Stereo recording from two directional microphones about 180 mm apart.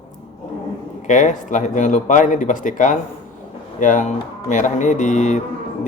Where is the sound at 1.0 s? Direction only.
45° left (ahead or behind).